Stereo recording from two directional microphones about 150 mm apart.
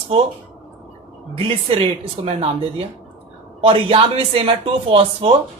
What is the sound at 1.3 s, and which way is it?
Speech, 35° right (ahead or behind).